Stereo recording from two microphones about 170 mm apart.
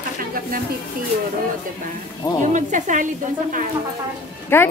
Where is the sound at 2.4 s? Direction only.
50° right (ahead or behind).